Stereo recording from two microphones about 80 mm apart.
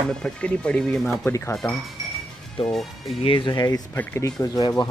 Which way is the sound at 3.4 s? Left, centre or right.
Left.